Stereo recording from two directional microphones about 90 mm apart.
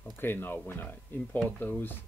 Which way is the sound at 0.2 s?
25° left (ahead or behind).